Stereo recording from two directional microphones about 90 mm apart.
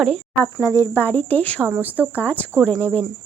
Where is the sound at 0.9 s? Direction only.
25° left (ahead or behind).